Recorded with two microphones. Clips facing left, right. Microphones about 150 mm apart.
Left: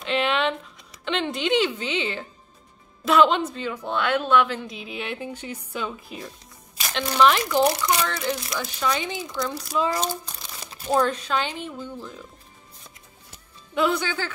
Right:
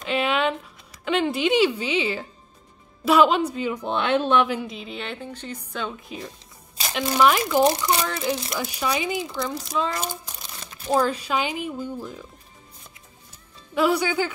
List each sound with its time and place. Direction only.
0.0 s a sound: 5° right (ahead or behind)
1.0 s speech: 5° right (ahead or behind)
4.6 s a woman's voice: centre (ahead or behind)
10.9 s speech: 5° right (ahead or behind)
13.7 s speech: 10° right (ahead or behind)